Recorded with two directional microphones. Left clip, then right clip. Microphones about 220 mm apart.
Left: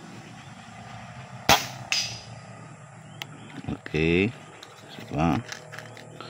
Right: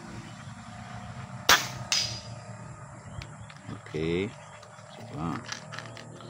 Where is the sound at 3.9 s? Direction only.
40° left (ahead or behind).